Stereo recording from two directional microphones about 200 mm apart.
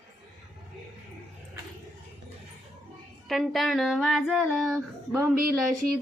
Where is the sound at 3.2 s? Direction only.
Centre (ahead or behind).